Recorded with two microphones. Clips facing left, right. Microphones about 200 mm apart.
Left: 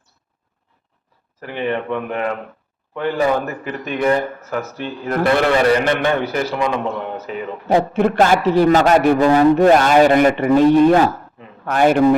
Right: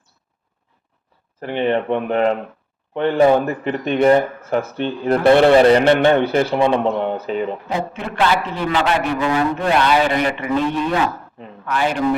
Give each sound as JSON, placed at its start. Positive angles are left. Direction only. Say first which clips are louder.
{"t": 1.4, "sound": "a man's voice", "louder": "right 3 dB", "side_deg": -30}
{"t": 7.7, "sound": "speech", "louder": "left 9 dB", "side_deg": 50}
{"t": 8.1, "sound": "speech", "louder": "left 3 dB", "side_deg": 40}